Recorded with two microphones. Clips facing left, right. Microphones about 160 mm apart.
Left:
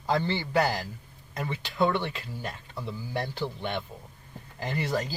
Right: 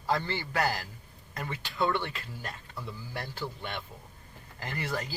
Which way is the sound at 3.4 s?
20° left (ahead or behind).